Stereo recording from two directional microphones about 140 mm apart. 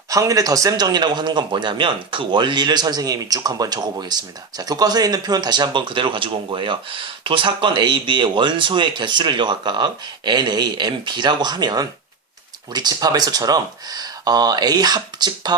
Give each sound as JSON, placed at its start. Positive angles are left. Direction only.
{"t": 0.1, "sound": "a man's voice", "side_deg": -25}